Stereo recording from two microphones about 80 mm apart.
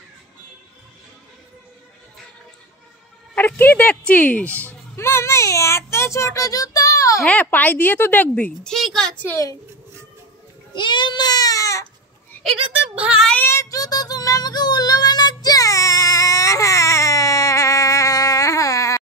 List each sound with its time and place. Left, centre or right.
3.3 s speech: left
4.9 s a child's voice: left
7.2 s speech: left
8.6 s a sound: centre
9.1 s a woman's voice: left
10.7 s a sound: left
13.0 s speech: centre
13.4 s child singing: left